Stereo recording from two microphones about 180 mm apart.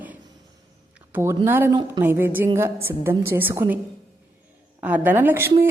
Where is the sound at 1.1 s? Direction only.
15° right (ahead or behind).